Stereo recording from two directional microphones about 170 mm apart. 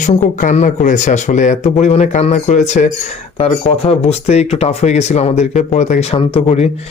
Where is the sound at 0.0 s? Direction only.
50° left (ahead or behind).